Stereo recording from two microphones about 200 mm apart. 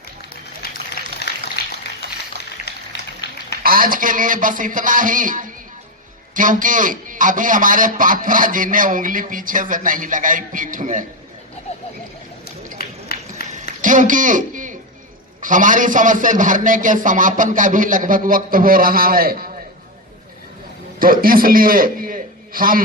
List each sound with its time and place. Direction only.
0.6 s a sound: 50° left (ahead or behind)
3.2 s a sound: 55° left (ahead or behind)
3.6 s a man's voice: 45° right (ahead or behind)
12.8 s run: 50° left (ahead or behind)
13.8 s a man's voice: 40° right (ahead or behind)
21.0 s a man's voice: 45° right (ahead or behind)